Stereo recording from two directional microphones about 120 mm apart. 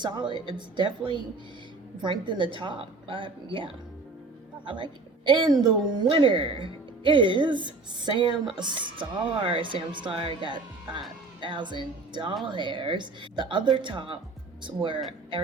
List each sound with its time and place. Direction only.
0.0 s speech: 40° right (ahead or behind)